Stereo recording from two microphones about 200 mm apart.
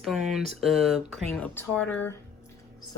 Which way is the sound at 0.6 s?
Centre (ahead or behind).